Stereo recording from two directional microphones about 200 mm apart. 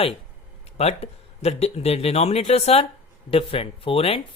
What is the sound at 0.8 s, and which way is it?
Speech, 30° left (ahead or behind).